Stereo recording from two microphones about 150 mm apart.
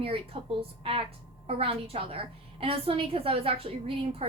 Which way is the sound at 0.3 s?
35° right (ahead or behind).